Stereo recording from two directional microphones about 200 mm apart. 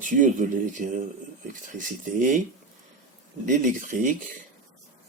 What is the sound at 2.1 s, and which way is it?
Speech, 40° right (ahead or behind).